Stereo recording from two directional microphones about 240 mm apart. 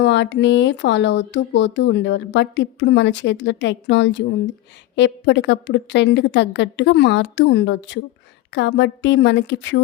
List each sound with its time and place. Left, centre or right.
0.0 s speech: left